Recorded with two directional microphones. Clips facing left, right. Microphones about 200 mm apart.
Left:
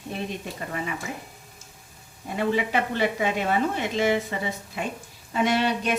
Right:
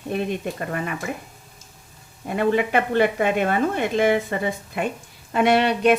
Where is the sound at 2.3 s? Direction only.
55° right (ahead or behind).